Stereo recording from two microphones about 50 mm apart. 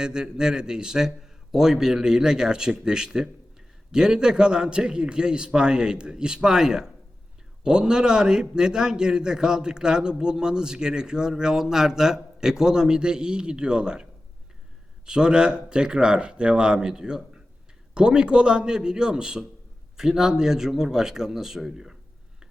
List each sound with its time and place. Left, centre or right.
0.0 s a man's voice: centre